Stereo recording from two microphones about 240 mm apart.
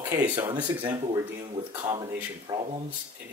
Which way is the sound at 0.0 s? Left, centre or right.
Centre.